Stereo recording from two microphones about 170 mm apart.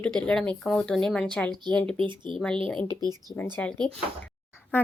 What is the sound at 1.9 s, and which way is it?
Speech, 30° right (ahead or behind).